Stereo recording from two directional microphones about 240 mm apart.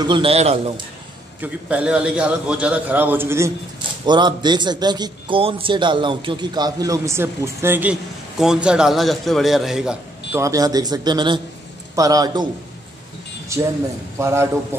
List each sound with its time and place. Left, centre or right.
0.0 s a man's voice: right
1.4 s a man's voice: centre
10.3 s a man's voice: centre
13.5 s a man's voice: centre